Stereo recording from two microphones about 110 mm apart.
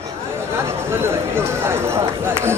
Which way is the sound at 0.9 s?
20° right (ahead or behind).